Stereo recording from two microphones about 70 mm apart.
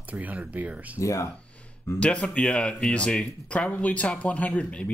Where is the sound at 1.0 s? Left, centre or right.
Left.